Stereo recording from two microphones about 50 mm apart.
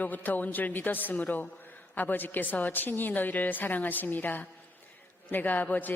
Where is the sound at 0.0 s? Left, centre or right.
Left.